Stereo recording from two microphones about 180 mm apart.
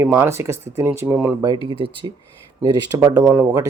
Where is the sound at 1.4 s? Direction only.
25° right (ahead or behind).